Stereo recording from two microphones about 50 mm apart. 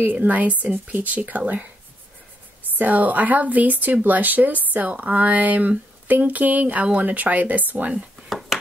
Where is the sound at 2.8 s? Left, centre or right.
Right.